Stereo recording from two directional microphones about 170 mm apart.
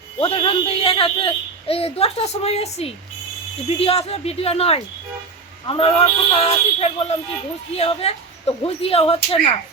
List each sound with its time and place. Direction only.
0.2 s a child's voice: 35° left (ahead or behind)